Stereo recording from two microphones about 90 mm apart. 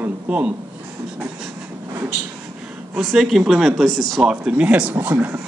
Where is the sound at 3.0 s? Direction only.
Centre (ahead or behind).